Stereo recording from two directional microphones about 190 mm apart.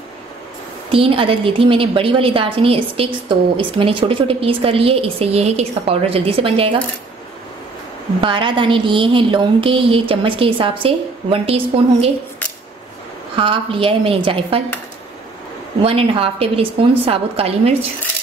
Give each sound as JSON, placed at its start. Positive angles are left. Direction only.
{"t": 0.9, "sound": "a woman's voice", "side_deg": -30}
{"t": 8.2, "sound": "a woman's voice", "side_deg": -25}
{"t": 13.4, "sound": "a woman's voice", "side_deg": -25}
{"t": 15.8, "sound": "a woman's voice", "side_deg": -30}